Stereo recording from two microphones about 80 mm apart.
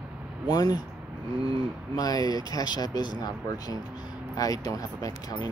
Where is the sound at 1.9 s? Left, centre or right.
Left.